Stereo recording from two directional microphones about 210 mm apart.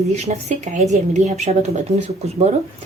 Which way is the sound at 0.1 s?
30° right (ahead or behind).